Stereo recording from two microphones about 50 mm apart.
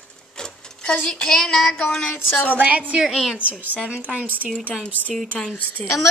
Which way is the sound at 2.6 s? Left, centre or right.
Right.